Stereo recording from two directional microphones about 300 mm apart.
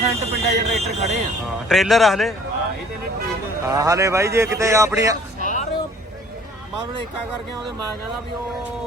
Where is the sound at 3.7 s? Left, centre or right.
Centre.